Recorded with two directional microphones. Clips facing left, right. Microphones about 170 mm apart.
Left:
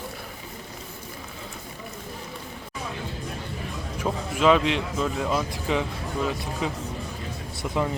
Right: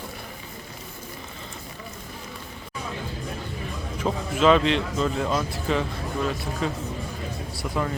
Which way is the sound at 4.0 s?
10° left (ahead or behind).